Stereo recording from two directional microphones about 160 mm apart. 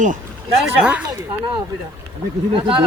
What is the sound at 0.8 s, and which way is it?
Speech, 5° right (ahead or behind).